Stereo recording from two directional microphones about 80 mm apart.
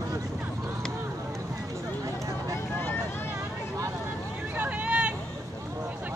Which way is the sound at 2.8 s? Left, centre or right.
Left.